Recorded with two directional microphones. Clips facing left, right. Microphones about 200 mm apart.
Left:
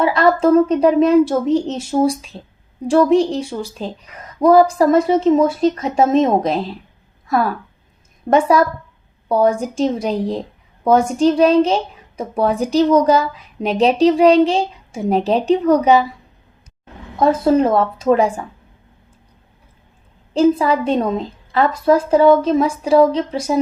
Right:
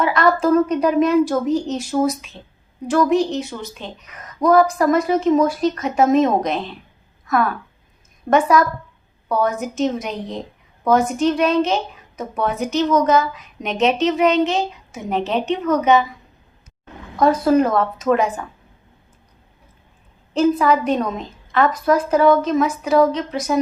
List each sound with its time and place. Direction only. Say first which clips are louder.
0.0 s a woman's voice: left 3 dB; 30° left (ahead or behind)
17.2 s a woman's voice: left 1 dB; 25° left (ahead or behind)
20.3 s a woman's voice: left 2 dB; 30° left (ahead or behind)